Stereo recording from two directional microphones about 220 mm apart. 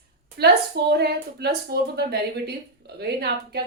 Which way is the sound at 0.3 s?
45° right (ahead or behind).